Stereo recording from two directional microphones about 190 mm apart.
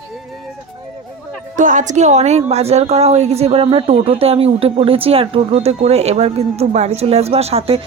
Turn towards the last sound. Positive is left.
turn(degrees=-30)  # may be behind; listen again after turning